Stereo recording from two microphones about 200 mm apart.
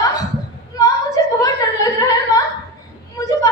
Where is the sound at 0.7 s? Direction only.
15° left (ahead or behind).